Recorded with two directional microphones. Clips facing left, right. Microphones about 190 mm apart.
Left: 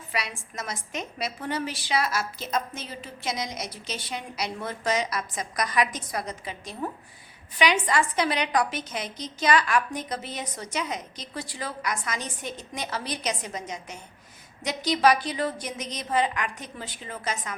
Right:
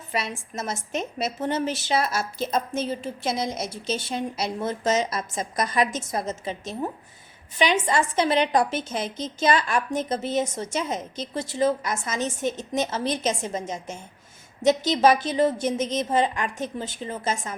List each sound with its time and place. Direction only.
0.1 s a woman's voice: 25° right (ahead or behind)
2.8 s a woman's voice: 50° right (ahead or behind)
3.2 s a woman's voice: 30° right (ahead or behind)